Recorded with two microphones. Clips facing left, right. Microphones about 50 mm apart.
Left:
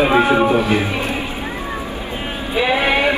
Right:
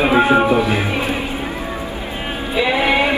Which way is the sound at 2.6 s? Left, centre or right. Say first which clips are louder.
Even; left.